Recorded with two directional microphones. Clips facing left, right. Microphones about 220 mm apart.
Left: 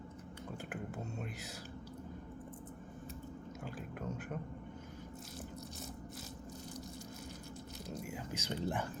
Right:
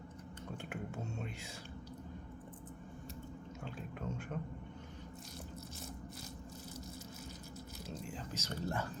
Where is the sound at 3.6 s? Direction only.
Centre (ahead or behind).